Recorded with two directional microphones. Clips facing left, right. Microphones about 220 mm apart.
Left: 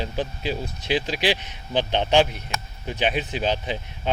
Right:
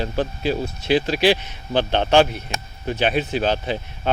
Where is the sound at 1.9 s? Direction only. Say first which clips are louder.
Right 3 dB; 50° right (ahead or behind).